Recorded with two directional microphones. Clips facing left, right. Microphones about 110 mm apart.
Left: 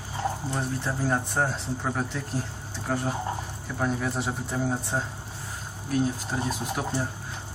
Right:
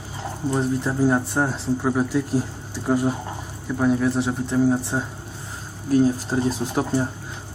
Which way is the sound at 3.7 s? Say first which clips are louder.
Right 8 dB; centre (ahead or behind).